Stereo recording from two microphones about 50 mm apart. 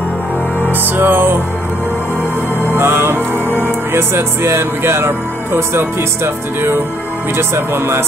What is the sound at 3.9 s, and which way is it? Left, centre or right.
Speech, right.